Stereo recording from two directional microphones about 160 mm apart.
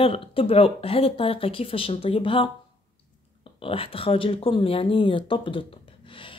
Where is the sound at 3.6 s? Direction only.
35° left (ahead or behind).